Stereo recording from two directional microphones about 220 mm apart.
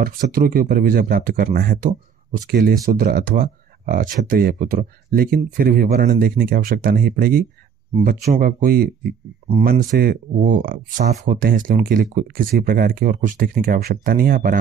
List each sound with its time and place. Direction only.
0.0 s speech: 40° right (ahead or behind)